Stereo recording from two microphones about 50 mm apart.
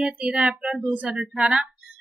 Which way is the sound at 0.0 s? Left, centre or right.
Centre.